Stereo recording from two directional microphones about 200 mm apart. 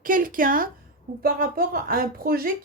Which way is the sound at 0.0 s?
45° right (ahead or behind).